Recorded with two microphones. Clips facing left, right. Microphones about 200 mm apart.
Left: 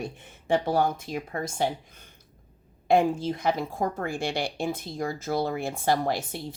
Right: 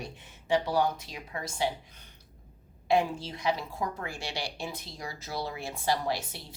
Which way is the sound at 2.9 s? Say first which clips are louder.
Left 5 dB; 50° left (ahead or behind).